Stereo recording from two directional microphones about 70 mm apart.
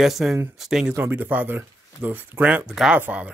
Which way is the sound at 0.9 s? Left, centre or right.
Right.